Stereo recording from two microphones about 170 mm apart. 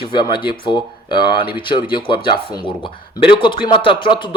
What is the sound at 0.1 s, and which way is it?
A man's voice, 25° left (ahead or behind).